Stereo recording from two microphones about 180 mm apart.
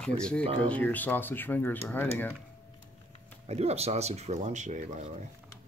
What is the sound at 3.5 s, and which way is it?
Speech, 35° right (ahead or behind).